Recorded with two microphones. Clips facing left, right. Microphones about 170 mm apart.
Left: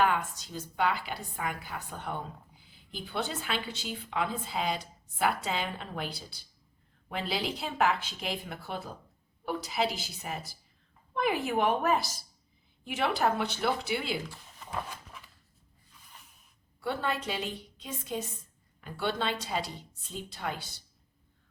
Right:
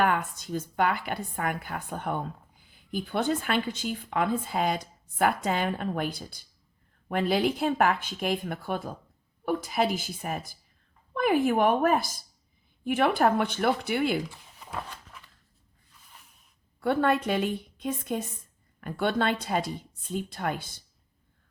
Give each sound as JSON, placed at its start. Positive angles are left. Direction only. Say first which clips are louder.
{"t": 0.0, "sound": "speech", "louder": "right 2 dB", "side_deg": -55}
{"t": 14.6, "sound": "a sound", "louder": "even", "side_deg": 0}
{"t": 16.8, "sound": "a woman's voice", "louder": "right 8 dB", "side_deg": -55}